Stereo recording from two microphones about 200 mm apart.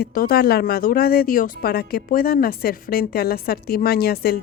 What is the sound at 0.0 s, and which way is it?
Speech, 45° left (ahead or behind).